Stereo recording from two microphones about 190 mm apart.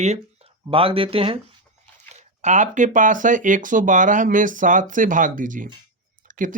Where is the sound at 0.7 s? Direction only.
30° right (ahead or behind).